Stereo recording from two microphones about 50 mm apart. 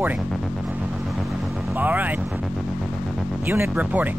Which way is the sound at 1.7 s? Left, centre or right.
Right.